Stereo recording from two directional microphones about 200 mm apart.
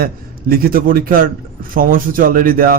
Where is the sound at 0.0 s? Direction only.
50° right (ahead or behind).